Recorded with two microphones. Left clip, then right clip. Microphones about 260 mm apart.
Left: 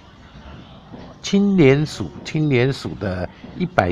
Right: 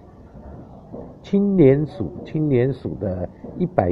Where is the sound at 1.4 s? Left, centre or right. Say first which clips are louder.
Even; left.